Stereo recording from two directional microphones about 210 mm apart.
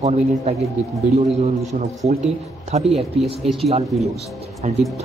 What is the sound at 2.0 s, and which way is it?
Speech, 35° right (ahead or behind).